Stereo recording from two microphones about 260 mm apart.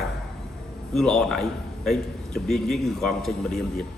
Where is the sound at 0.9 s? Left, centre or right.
Centre.